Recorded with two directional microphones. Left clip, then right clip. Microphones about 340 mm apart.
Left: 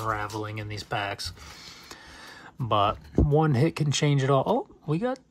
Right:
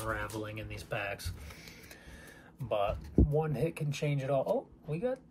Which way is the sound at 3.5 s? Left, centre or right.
Left.